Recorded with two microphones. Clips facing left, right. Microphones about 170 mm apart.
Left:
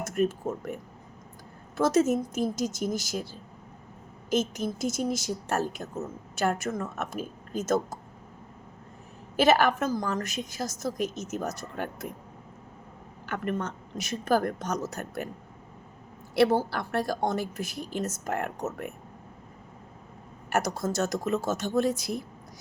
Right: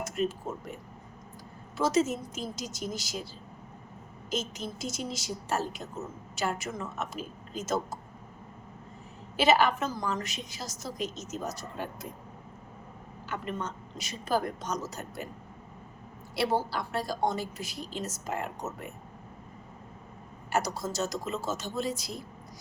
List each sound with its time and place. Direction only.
0.0 s a woman's voice: 50° left (ahead or behind)
1.7 s a woman's voice: 50° left (ahead or behind)
4.3 s a woman's voice: 50° left (ahead or behind)
9.3 s a woman's voice: 50° left (ahead or behind)
13.2 s a woman's voice: 55° left (ahead or behind)
16.3 s a woman's voice: 55° left (ahead or behind)
20.5 s a woman's voice: 55° left (ahead or behind)